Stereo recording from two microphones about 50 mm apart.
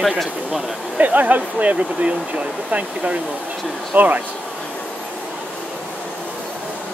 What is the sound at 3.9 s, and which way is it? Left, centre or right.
Speech, right.